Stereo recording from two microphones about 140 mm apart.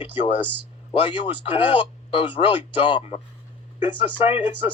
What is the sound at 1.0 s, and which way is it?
Speech, 40° left (ahead or behind).